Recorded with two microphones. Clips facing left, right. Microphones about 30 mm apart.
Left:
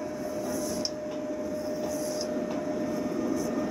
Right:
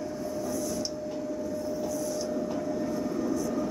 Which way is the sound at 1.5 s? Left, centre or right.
Left.